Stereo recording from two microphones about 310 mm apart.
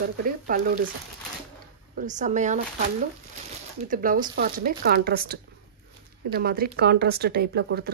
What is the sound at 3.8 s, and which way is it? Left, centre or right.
Speech, right.